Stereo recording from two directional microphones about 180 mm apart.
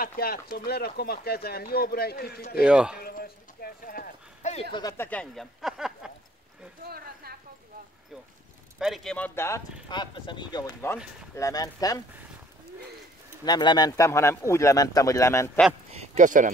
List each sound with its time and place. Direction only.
0.0 s speech: 55° left (ahead or behind)
2.6 s speech: 5° right (ahead or behind)
3.0 s speech: 55° left (ahead or behind); by 4.6 s 40° left (ahead or behind)
4.7 s speech: 15° left (ahead or behind); by 6.1 s 5° right (ahead or behind)
6.9 s a sound: 55° right (ahead or behind)
8.7 s speech: centre (ahead or behind)
9.8 s speech: 25° left (ahead or behind)
13.5 s speech: 25° left (ahead or behind)
15.9 s speech: 40° right (ahead or behind)